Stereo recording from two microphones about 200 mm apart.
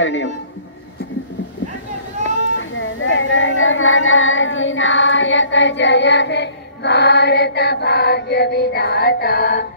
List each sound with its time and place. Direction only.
0.0 s a man's voice: 70° left (ahead or behind)
2.2 s speech: 75° left (ahead or behind); by 9.7 s 50° left (ahead or behind)